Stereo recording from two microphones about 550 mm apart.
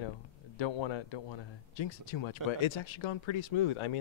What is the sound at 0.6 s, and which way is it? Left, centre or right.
Speech, left.